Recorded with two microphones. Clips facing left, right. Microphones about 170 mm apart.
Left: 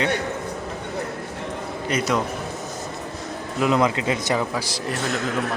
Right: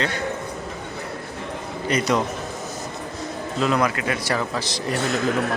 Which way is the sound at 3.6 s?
20° left (ahead or behind).